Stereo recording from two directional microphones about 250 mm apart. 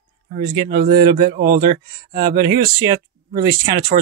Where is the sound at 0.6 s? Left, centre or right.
Centre.